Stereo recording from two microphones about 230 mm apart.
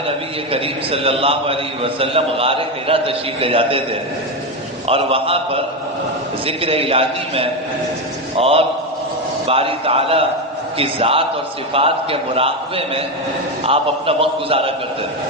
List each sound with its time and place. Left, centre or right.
0.5 s a man's voice: right
4.9 s a man's voice: right